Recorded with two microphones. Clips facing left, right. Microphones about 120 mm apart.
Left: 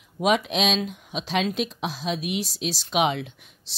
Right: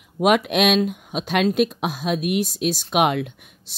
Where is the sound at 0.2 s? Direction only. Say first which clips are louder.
Right 5 dB; 60° right (ahead or behind).